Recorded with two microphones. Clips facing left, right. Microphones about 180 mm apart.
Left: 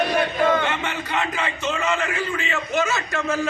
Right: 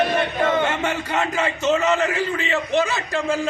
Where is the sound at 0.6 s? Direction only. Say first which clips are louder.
Right 3 dB; 45° right (ahead or behind).